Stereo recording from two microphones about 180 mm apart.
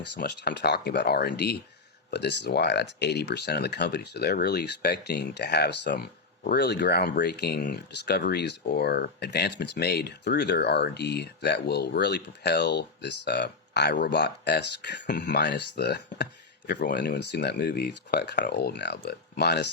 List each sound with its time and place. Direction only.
0.0 s speech: 70° left (ahead or behind)
15.0 s speech: 50° left (ahead or behind)
15.3 s speech: 75° left (ahead or behind)